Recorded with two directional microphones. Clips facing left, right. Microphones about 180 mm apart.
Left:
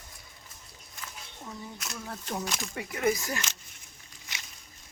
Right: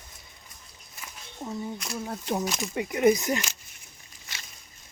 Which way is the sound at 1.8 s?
30° right (ahead or behind).